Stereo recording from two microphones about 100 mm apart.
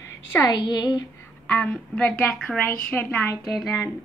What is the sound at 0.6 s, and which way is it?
Speech, 40° left (ahead or behind).